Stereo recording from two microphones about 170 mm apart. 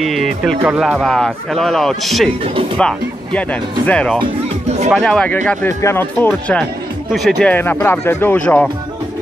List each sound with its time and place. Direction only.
0.0 s speech: centre (ahead or behind)
4.2 s speech: 40° right (ahead or behind)
4.9 s speech: 5° left (ahead or behind)